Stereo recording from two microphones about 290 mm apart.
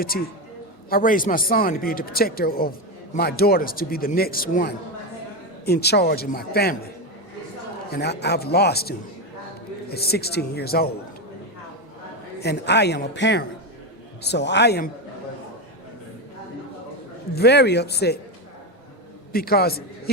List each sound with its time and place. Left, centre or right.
0.9 s speech: left
12.4 s speech: left
17.3 s speech: left
19.3 s speech: left